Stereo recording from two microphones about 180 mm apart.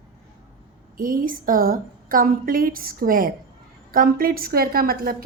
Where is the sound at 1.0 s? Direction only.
50° right (ahead or behind).